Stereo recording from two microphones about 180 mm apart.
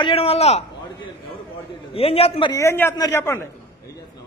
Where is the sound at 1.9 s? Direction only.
30° left (ahead or behind).